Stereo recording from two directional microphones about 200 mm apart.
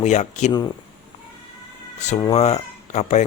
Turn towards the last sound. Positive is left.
turn(degrees=35)  # may be behind; listen again after turning